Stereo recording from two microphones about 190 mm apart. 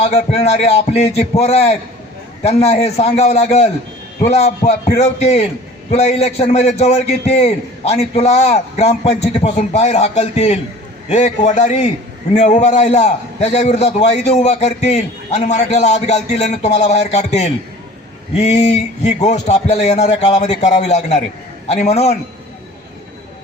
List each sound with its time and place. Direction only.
0.0 s a man's voice: 35° left (ahead or behind)